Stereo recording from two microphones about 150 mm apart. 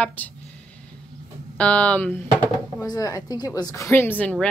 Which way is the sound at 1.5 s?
10° left (ahead or behind).